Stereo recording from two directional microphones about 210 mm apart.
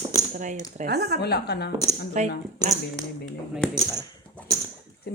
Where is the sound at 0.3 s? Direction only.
35° right (ahead or behind).